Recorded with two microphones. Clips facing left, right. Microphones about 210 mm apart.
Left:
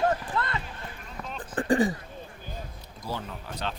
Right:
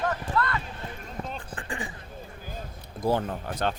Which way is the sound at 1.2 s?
45° right (ahead or behind).